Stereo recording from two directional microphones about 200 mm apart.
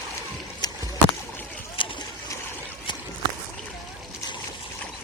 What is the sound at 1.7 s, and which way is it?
Boat, 25° left (ahead or behind).